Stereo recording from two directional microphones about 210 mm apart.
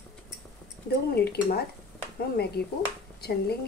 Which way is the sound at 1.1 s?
50° left (ahead or behind).